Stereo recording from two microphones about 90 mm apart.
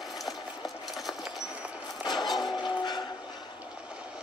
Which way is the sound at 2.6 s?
55° left (ahead or behind).